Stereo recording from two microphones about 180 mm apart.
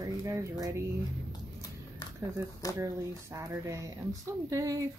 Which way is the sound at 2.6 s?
20° left (ahead or behind).